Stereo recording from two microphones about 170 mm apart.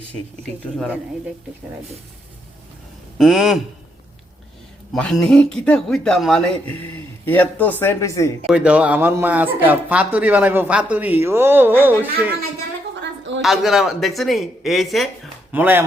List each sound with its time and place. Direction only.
3.2 s speech: centre (ahead or behind)
4.9 s speech: 5° left (ahead or behind)
8.4 s speech: 5° right (ahead or behind)
13.0 s a sound: 90° right
13.4 s speech: centre (ahead or behind)
15.5 s speech: 10° right (ahead or behind)